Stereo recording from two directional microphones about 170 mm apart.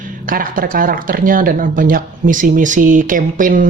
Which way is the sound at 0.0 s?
55° right (ahead or behind).